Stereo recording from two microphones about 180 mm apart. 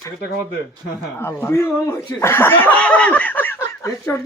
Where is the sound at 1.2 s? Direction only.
10° left (ahead or behind).